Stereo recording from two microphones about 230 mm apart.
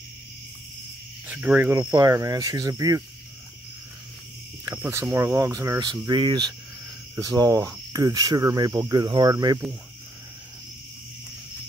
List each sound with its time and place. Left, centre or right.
1.2 s cricket: centre
4.6 s cricket: centre